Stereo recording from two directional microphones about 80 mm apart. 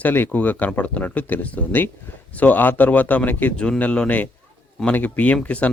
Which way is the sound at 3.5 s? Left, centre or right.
Centre.